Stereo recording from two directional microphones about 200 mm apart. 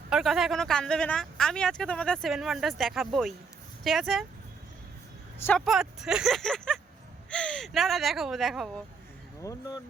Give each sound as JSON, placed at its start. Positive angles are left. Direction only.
{"t": 0.1, "sound": "speech", "side_deg": 0}
{"t": 5.4, "sound": "speech", "side_deg": 5}
{"t": 9.4, "sound": "speech", "side_deg": 20}